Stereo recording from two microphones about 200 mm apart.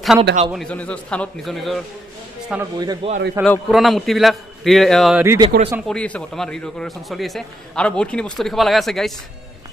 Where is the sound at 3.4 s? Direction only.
Centre (ahead or behind).